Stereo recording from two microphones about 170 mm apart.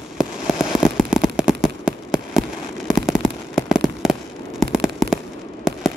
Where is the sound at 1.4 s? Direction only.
5° right (ahead or behind).